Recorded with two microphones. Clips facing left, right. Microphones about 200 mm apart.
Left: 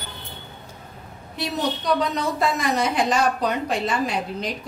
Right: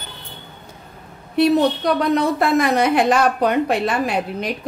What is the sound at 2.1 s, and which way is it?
A woman's voice, 60° right (ahead or behind).